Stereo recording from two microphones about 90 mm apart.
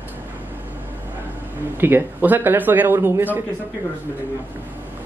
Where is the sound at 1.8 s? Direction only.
20° right (ahead or behind).